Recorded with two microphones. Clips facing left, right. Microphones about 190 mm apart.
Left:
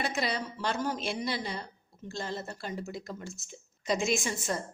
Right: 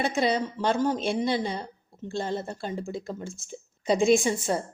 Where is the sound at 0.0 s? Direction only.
30° right (ahead or behind).